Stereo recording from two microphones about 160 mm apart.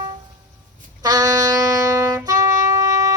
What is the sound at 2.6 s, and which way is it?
Shofar, 20° right (ahead or behind).